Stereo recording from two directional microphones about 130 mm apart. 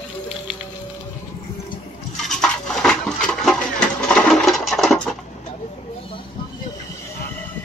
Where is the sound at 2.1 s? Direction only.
5° left (ahead or behind).